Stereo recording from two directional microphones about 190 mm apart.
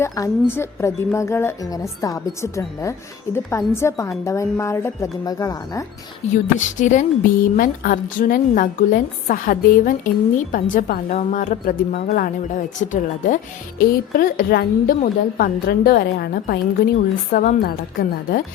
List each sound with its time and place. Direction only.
0.0 s speech: 15° left (ahead or behind)
6.2 s speech: 35° left (ahead or behind); by 18.4 s 50° left (ahead or behind)